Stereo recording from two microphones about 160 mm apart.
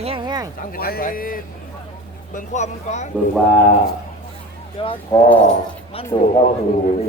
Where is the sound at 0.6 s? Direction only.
65° left (ahead or behind).